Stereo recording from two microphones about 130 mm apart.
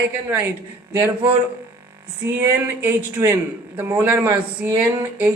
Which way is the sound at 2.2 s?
15° right (ahead or behind).